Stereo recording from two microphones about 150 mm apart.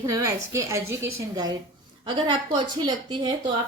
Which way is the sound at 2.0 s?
30° right (ahead or behind).